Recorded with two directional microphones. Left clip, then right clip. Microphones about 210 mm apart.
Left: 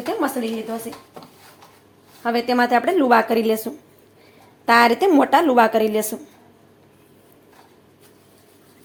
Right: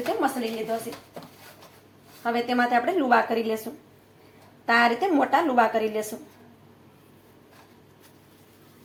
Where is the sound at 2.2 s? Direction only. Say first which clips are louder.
Left 5 dB; 50° left (ahead or behind).